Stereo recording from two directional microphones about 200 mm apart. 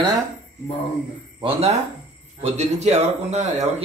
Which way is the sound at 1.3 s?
30° right (ahead or behind).